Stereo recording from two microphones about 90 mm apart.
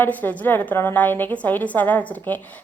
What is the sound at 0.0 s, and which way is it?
A woman's voice, 20° left (ahead or behind).